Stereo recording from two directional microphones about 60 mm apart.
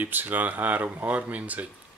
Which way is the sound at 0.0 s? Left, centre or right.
Right.